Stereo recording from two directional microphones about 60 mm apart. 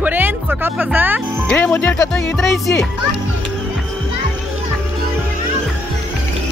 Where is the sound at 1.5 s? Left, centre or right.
Left.